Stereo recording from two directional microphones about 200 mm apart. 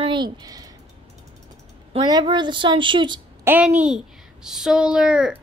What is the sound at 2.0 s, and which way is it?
Speech, 20° right (ahead or behind).